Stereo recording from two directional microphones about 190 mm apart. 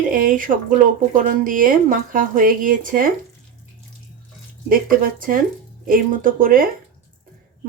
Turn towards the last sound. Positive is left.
turn(degrees=-45)  # may be behind; listen again after turning